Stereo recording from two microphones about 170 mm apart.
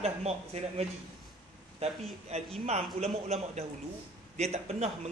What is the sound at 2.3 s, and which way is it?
Speech, 40° right (ahead or behind).